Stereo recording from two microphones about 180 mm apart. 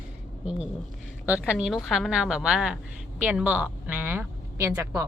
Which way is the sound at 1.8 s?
Centre (ahead or behind).